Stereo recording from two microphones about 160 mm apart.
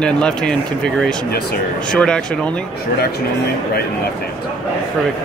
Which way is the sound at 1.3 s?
80° left.